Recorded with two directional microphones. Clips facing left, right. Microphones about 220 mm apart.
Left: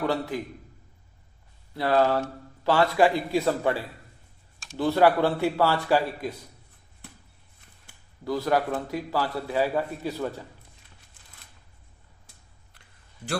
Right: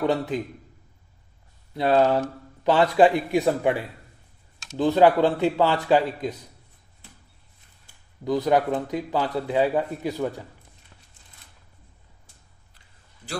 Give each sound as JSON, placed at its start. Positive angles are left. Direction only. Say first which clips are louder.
{"t": 0.0, "sound": "a man's voice", "louder": "right 3 dB", "side_deg": -20}
{"t": 1.7, "sound": "a man's voice", "louder": "right 3 dB", "side_deg": -20}
{"t": 8.2, "sound": "a man's voice", "louder": "right 4 dB", "side_deg": -20}